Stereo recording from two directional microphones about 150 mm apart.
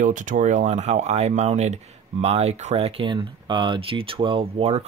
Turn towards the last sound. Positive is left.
turn(degrees=-45)  # may be behind; listen again after turning